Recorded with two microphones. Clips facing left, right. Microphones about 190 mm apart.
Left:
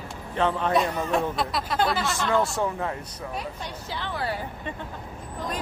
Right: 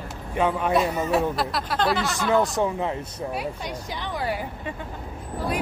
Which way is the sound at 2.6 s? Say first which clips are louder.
Right 3 dB; 15° right (ahead or behind).